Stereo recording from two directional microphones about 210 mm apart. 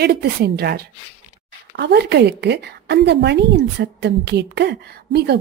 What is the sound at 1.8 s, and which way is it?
A woman's voice, 50° right (ahead or behind).